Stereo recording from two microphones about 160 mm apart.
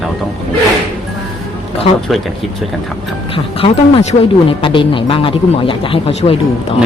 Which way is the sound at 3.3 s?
35° left (ahead or behind).